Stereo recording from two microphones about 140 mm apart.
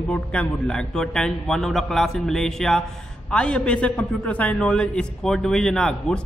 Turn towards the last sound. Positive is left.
turn(degrees=5)  # may be behind; listen again after turning